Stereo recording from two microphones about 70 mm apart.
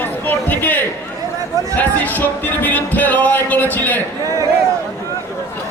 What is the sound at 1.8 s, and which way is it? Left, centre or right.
Speech, left.